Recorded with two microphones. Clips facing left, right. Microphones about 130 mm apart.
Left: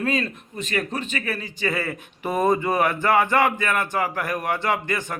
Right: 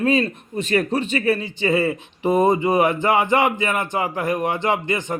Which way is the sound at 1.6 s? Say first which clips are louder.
Right 7 dB; 20° right (ahead or behind).